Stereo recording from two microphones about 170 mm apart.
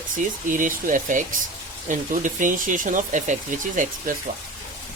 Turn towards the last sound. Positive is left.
turn(degrees=-50)  # may be behind; listen again after turning